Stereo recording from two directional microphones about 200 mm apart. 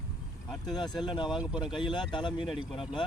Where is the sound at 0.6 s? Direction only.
20° left (ahead or behind).